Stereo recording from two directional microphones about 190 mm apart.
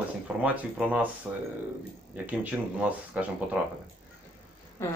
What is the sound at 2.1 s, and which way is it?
Speech, 10° right (ahead or behind).